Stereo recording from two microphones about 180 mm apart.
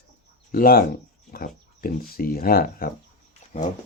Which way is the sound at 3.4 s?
40° left (ahead or behind).